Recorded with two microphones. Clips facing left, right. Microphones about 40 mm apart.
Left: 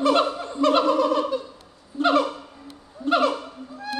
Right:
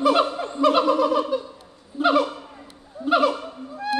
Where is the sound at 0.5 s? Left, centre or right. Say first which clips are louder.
Right 1 dB; centre.